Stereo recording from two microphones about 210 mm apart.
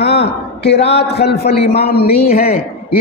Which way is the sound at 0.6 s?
55° left (ahead or behind).